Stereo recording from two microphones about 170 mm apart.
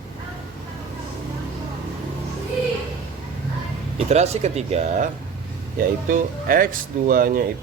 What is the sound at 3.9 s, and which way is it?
A man's voice, 40° right (ahead or behind).